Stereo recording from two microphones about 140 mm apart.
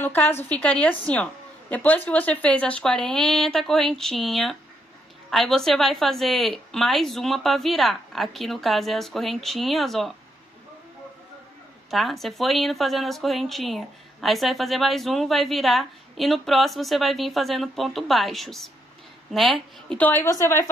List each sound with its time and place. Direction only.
0.0 s a woman's voice: 10° left (ahead or behind)
11.9 s speech: centre (ahead or behind)
20.0 s a woman's voice: 15° left (ahead or behind)